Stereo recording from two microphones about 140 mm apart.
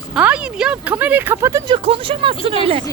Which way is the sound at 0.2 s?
10° right (ahead or behind).